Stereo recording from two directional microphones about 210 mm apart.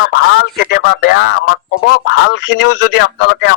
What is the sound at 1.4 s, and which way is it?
Speech, 85° left.